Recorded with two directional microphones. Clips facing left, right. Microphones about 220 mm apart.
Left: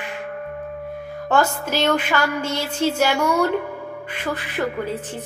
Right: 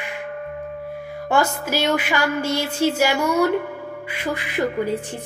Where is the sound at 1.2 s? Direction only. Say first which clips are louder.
Left 1 dB; 10° right (ahead or behind).